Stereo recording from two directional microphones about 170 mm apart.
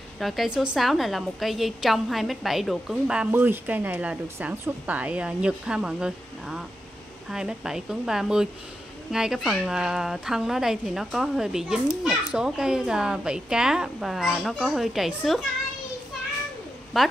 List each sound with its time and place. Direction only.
0.2 s a woman's voice: centre (ahead or behind)
17.0 s a woman's voice: centre (ahead or behind)